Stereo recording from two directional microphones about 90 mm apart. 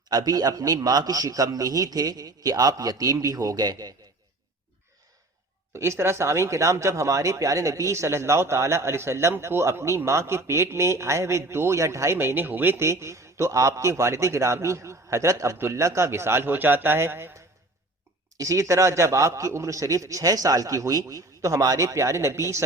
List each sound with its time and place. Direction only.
0.1 s a man's voice: 45° right (ahead or behind)
5.7 s speech: 30° right (ahead or behind)
18.3 s speech: 35° right (ahead or behind)